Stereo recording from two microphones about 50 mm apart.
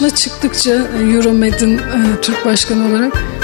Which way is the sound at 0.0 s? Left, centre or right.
Left.